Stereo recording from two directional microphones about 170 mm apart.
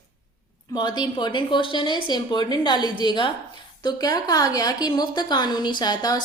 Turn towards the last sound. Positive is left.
turn(degrees=25)  # may be behind; listen again after turning